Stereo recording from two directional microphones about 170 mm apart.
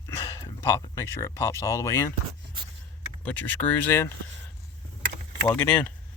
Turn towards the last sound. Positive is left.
turn(degrees=5)  # may be behind; listen again after turning